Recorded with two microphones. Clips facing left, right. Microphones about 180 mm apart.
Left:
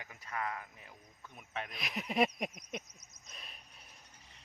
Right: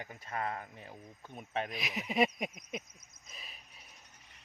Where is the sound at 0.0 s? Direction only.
30° right (ahead or behind).